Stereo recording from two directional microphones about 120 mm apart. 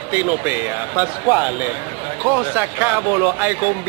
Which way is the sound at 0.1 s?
15° right (ahead or behind).